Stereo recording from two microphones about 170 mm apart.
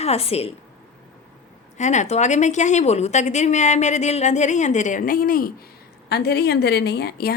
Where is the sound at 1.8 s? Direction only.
45° left (ahead or behind).